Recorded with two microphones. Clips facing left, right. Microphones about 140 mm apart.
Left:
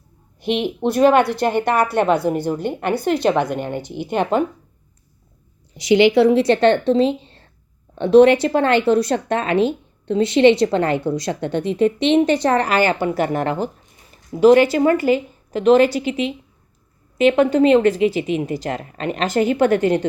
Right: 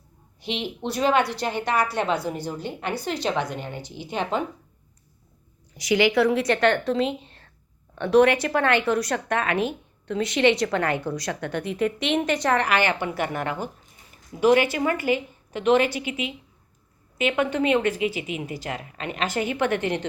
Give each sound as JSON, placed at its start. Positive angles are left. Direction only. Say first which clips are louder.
{"t": 0.4, "sound": "a woman's voice", "louder": "left 9 dB", "side_deg": 55}
{"t": 5.7, "sound": "a woman's voice", "louder": "left 7 dB", "side_deg": 25}